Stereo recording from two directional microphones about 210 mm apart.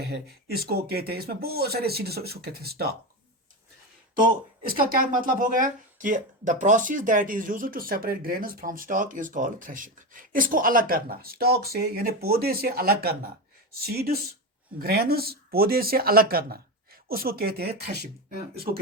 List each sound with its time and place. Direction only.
0.0 s speech: 50° right (ahead or behind)
4.6 s speech: 45° right (ahead or behind)